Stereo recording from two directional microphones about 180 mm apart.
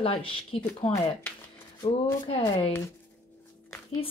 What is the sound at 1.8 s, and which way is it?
Speech, 30° left (ahead or behind).